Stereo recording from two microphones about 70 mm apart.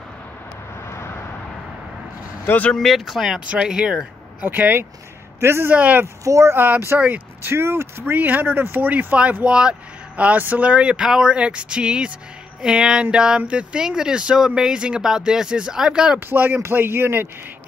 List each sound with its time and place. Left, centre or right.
0.8 s vehicle: left
2.4 s speech: left
2.7 s speech: centre
3.3 s speech: centre
4.4 s speech: right
5.8 s speech: right
6.2 s speech: right
6.5 s speech: right
7.4 s speech: right
8.0 s speech: right
16.3 s speech: right